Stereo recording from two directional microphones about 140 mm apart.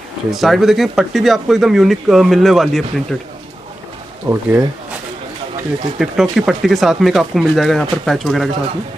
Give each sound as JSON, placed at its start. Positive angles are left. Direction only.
{"t": 0.3, "sound": "speech", "side_deg": 0}
{"t": 4.3, "sound": "speech", "side_deg": -15}
{"t": 5.9, "sound": "speech", "side_deg": 0}